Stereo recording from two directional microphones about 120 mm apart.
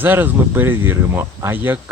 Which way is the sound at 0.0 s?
15° right (ahead or behind).